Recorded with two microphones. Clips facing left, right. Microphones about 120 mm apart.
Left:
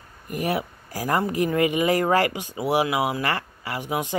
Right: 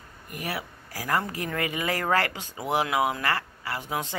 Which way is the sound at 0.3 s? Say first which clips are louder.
Left 8 dB; 25° left (ahead or behind).